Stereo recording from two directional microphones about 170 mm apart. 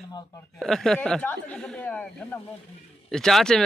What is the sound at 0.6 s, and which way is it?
Speech, centre (ahead or behind).